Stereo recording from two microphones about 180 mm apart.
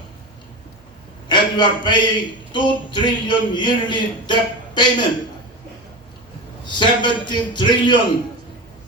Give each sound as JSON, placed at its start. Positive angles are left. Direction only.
{"t": 1.3, "sound": "a man's voice", "side_deg": 25}
{"t": 6.7, "sound": "a man's voice", "side_deg": 25}